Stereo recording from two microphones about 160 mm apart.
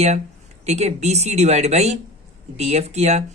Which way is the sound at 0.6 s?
45° right (ahead or behind).